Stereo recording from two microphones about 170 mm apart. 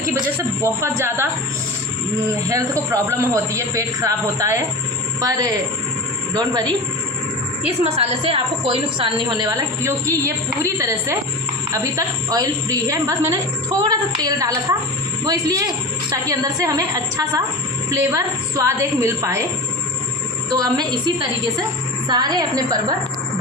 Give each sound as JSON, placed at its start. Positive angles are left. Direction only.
{"t": 0.6, "sound": "a man's voice", "side_deg": -15}
{"t": 2.5, "sound": "a man's voice", "side_deg": -20}
{"t": 6.3, "sound": "a woman's voice", "side_deg": -20}
{"t": 7.8, "sound": "a woman's voice", "side_deg": -35}
{"t": 20.5, "sound": "a woman's voice", "side_deg": -25}